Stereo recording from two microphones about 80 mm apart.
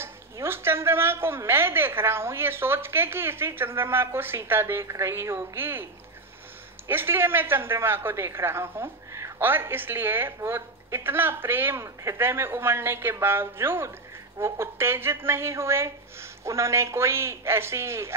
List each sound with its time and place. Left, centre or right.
0.0 s a woman's voice: right
6.9 s a woman's voice: right
11.8 s a woman's voice: right
12.2 s a woman's voice: right